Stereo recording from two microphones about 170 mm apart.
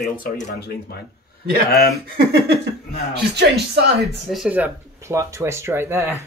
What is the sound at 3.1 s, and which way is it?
Speech, 75° right (ahead or behind).